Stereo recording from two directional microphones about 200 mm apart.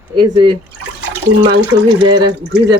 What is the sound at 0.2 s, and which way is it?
Speech, 20° right (ahead or behind).